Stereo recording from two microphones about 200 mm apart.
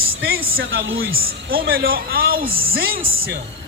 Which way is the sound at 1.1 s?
50° right (ahead or behind).